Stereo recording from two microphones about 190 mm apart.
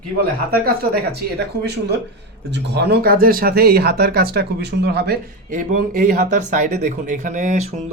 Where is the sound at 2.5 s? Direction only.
60° right (ahead or behind).